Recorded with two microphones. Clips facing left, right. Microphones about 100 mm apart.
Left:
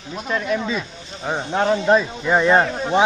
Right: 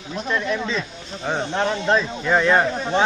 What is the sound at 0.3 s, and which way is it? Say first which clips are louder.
Speech: left 2 dB; 10° left (ahead or behind).